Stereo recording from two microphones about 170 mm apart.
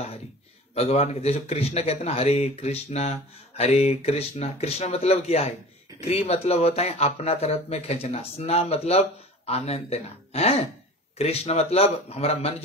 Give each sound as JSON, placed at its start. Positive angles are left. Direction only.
{"t": 0.7, "sound": "a man's voice", "side_deg": 40}